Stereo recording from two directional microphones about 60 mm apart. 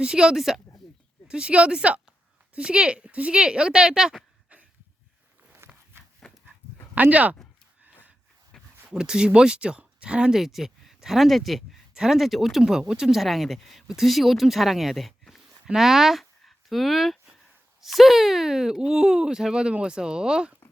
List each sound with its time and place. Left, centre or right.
0.0 s speech: centre
5.6 s a sound: right
6.9 s speech: right
8.5 s a sound: centre
8.9 s speech: centre
10.4 s speech: centre